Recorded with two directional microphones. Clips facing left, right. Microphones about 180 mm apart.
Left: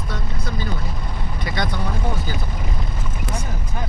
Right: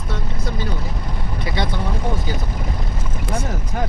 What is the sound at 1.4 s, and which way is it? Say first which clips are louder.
Vehicle: right 1 dB; 25° right (ahead or behind).